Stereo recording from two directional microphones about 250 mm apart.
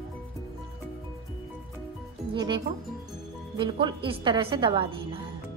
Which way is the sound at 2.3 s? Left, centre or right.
Centre.